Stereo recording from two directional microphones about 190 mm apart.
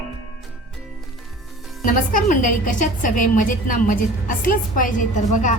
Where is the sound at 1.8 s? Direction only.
45° left (ahead or behind).